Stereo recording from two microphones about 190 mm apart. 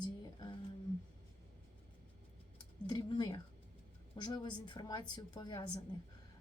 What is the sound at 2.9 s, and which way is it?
A woman's voice, 25° left (ahead or behind).